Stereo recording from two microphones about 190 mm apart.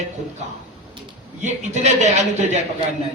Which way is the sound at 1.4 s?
40° right (ahead or behind).